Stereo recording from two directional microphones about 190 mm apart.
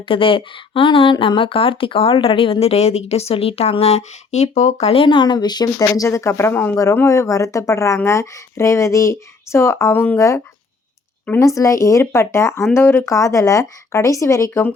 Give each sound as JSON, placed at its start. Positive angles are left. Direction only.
{"t": 0.0, "sound": "speech", "side_deg": 30}